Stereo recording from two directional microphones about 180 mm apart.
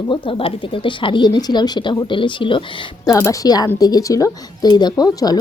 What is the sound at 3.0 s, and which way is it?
Speech, 20° left (ahead or behind).